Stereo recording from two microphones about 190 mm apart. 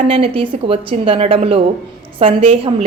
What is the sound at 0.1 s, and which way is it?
A woman's voice, 30° right (ahead or behind).